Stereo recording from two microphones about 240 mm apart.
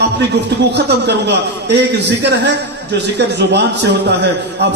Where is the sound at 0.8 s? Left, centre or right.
Right.